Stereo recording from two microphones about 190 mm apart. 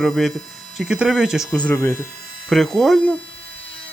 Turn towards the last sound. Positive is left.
turn(degrees=5)  # may be behind; listen again after turning